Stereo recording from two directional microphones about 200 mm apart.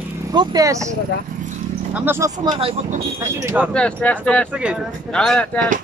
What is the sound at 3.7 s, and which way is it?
Speech, 5° left (ahead or behind).